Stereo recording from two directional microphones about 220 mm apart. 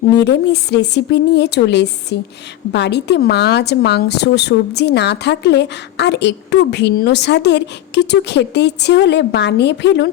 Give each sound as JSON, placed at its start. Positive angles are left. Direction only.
{"t": 0.2, "sound": "a woman's voice", "side_deg": 50}